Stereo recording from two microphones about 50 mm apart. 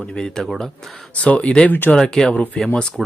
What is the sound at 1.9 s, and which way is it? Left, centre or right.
Speech, centre.